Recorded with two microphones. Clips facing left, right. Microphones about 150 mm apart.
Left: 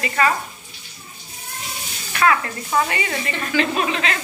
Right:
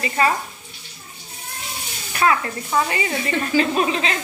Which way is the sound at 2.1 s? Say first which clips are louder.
Left 1 dB; 30° right (ahead or behind).